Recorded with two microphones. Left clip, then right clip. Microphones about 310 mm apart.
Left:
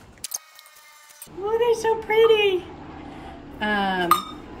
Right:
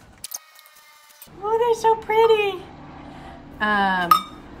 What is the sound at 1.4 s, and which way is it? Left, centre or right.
A woman's voice, right.